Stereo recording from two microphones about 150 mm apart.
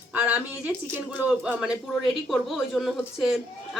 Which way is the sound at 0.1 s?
10° right (ahead or behind).